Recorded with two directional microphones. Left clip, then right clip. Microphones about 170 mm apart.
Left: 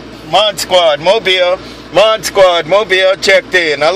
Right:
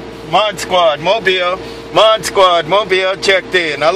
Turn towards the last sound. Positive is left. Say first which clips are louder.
# left 2 dB
turn(degrees=30)  # may be behind; listen again after turning